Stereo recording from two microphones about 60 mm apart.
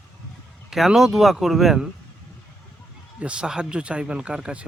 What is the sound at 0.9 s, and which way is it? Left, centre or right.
Speech, centre.